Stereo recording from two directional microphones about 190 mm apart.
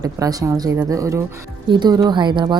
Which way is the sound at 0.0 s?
20° right (ahead or behind).